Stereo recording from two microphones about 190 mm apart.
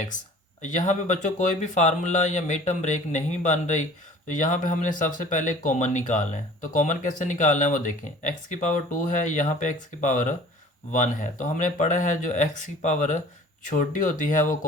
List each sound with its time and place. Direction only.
0.6 s speech: 40° left (ahead or behind)